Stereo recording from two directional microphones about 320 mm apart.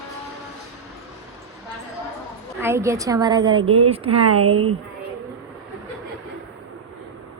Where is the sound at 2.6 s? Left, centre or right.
Centre.